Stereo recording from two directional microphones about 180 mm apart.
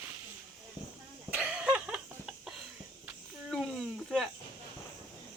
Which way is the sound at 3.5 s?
Centre (ahead or behind).